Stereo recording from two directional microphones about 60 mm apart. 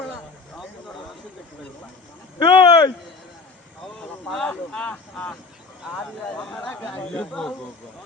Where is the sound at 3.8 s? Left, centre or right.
Centre.